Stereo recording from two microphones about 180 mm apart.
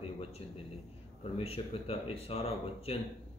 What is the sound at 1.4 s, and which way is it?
Speech, 35° left (ahead or behind).